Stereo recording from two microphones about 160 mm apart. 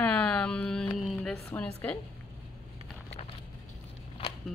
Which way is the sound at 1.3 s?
15° left (ahead or behind).